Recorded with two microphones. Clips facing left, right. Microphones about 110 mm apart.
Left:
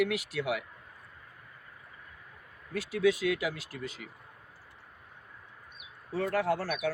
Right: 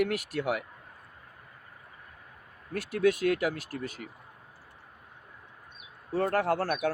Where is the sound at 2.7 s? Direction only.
55° right (ahead or behind).